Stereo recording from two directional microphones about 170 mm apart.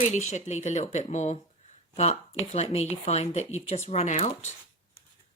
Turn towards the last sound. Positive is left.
turn(degrees=40)  # may be behind; listen again after turning